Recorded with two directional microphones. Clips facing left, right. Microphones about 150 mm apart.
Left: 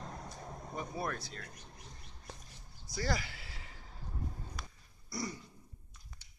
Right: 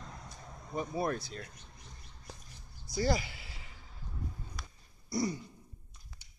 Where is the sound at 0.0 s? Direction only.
45° left (ahead or behind).